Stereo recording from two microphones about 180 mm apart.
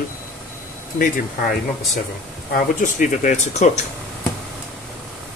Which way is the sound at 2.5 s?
45° left (ahead or behind).